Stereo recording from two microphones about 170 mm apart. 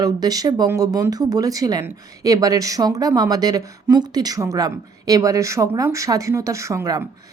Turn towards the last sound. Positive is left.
turn(degrees=-20)  # may be behind; listen again after turning